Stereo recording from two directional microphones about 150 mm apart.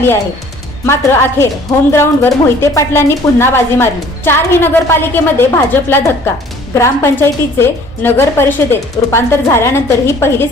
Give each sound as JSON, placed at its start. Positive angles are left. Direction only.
{"t": 0.9, "sound": "a woman's voice", "side_deg": 15}